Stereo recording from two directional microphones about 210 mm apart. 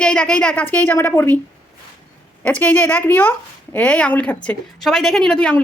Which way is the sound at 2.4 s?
10° left (ahead or behind).